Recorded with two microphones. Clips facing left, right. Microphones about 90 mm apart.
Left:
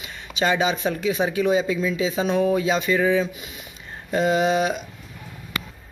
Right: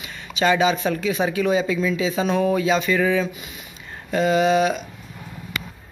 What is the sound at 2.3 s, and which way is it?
Speech, 5° left (ahead or behind).